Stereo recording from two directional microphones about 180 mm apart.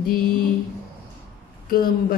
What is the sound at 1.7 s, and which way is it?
Speech, 55° left (ahead or behind).